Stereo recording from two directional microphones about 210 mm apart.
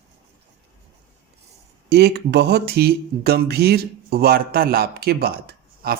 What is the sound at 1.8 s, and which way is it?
Speech, 50° right (ahead or behind).